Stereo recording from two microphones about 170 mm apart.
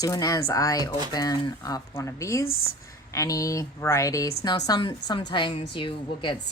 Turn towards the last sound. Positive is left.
turn(degrees=30)  # may be behind; listen again after turning